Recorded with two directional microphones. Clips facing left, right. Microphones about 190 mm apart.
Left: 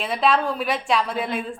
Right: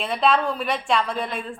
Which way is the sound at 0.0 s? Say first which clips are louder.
Even; centre (ahead or behind).